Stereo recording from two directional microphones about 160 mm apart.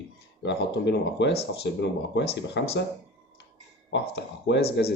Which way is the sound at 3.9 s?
90° left.